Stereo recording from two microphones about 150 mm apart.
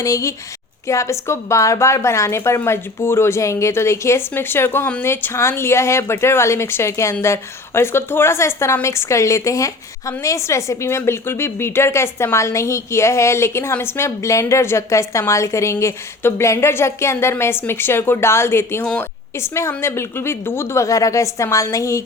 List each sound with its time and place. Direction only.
0.0 s a woman's voice: 20° left (ahead or behind)